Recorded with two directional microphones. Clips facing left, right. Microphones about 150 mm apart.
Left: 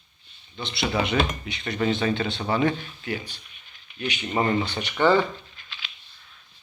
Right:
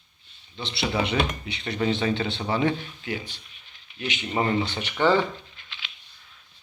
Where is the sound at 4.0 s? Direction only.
45° left (ahead or behind).